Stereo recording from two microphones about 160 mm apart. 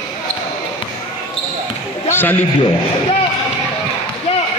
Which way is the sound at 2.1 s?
10° left (ahead or behind).